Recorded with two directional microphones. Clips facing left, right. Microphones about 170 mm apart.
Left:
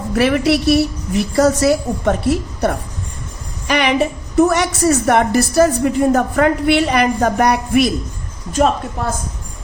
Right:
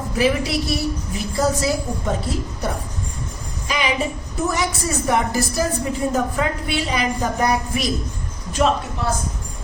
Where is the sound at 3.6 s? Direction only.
70° left (ahead or behind).